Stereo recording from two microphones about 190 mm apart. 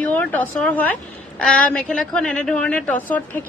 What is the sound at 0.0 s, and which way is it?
Speech, 10° left (ahead or behind).